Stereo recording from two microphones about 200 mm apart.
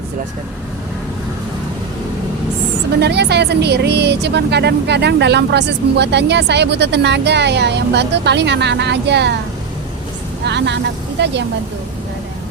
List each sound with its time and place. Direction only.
3.0 s speech: 55° right (ahead or behind)
10.4 s speech: 60° right (ahead or behind)